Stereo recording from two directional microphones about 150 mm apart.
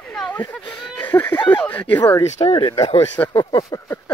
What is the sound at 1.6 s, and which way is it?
Speech, 10° left (ahead or behind).